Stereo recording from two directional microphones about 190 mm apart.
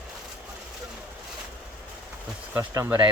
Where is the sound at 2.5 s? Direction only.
10° right (ahead or behind).